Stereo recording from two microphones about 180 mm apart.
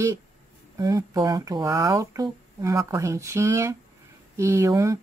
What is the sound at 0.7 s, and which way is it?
A man's voice, 20° right (ahead or behind).